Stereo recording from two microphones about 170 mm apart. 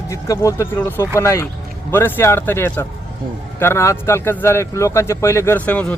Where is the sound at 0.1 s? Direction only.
20° left (ahead or behind).